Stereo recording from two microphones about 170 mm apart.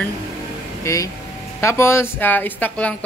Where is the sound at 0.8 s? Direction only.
20° left (ahead or behind).